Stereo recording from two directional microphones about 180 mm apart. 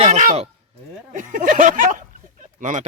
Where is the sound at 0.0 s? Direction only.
45° right (ahead or behind).